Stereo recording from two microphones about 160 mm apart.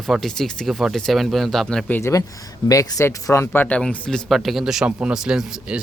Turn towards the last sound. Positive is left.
turn(degrees=-5)  # may be behind; listen again after turning